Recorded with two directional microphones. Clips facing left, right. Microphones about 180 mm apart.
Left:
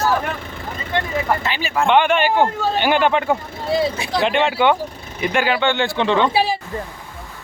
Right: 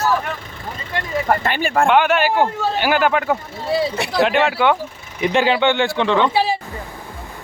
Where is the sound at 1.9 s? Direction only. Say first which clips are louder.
Left 2 dB; 5° right (ahead or behind).